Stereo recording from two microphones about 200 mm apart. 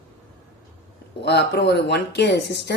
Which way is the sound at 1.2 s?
55° left (ahead or behind).